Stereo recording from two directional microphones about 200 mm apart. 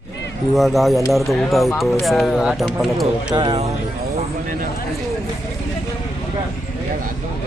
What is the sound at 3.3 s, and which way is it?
Speech, 25° right (ahead or behind).